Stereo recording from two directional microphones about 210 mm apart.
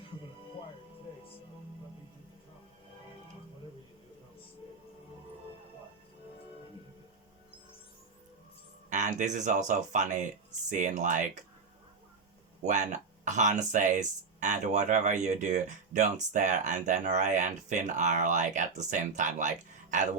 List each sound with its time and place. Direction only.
8.9 s speech: 35° right (ahead or behind)
12.6 s speech: 35° right (ahead or behind)